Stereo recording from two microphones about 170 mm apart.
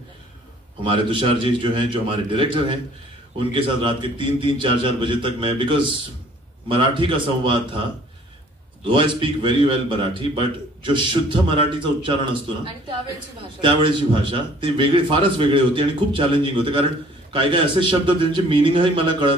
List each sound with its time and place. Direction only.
0.8 s a man's voice: 30° right (ahead or behind)
8.8 s a man's voice: 30° right (ahead or behind)
13.6 s a man's voice: 30° right (ahead or behind)